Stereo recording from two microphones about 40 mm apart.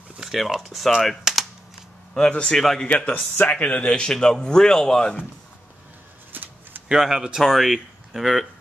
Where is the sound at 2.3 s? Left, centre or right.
Centre.